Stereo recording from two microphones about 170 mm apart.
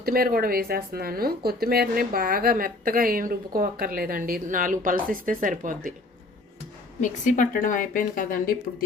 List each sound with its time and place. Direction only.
0.0 s a woman's voice: 60° right (ahead or behind)
7.0 s speech: 50° left (ahead or behind)